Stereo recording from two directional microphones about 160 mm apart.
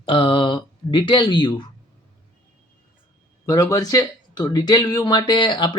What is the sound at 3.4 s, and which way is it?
Speech, 20° left (ahead or behind).